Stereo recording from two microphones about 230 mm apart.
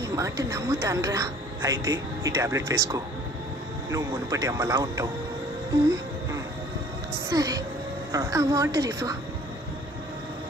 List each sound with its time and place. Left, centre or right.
0.0 s a woman's voice: centre
7.2 s a woman's voice: centre